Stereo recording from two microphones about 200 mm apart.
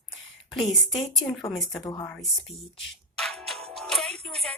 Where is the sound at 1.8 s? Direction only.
20° left (ahead or behind).